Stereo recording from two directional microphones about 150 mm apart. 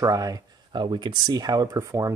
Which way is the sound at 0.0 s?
25° right (ahead or behind).